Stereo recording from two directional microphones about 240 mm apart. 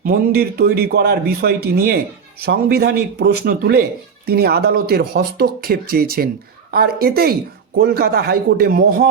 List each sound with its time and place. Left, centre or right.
0.0 s a man's voice: right